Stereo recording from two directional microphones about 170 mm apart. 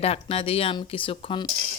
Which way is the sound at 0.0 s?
35° left (ahead or behind).